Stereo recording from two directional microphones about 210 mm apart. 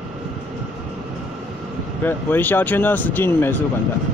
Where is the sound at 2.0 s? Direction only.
10° left (ahead or behind).